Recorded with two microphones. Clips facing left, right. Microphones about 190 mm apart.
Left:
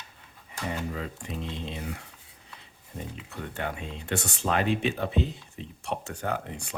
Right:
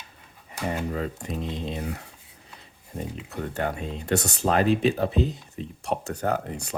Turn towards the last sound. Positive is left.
turn(degrees=-40)  # may be behind; listen again after turning